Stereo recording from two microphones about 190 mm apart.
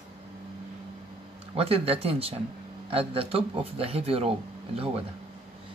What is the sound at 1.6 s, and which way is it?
Speech, 30° right (ahead or behind).